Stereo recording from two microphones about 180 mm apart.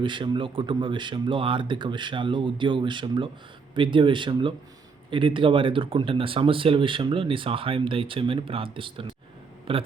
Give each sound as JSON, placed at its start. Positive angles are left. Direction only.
{"t": 0.0, "sound": "speech", "side_deg": -25}